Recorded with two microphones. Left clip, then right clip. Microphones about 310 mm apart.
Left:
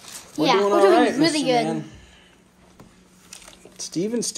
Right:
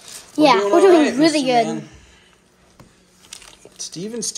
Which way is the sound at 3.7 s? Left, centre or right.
Centre.